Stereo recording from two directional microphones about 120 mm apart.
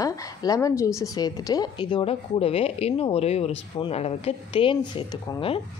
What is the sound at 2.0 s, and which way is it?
Speech, 55° left (ahead or behind).